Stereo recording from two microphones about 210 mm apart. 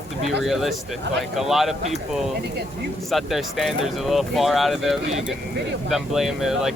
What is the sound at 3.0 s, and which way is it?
Speech, centre (ahead or behind).